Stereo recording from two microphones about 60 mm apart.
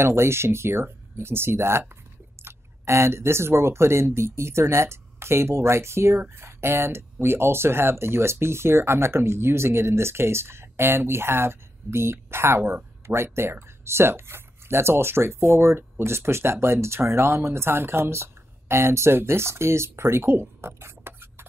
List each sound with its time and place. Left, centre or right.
0.0 s speech: right